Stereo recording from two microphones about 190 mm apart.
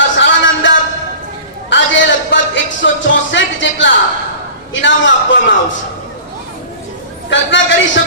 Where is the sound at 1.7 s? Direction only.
70° left (ahead or behind).